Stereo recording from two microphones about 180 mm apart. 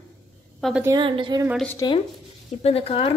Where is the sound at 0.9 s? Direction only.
30° right (ahead or behind).